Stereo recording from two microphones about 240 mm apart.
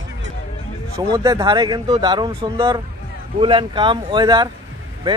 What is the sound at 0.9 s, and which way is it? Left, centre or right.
Speech, centre.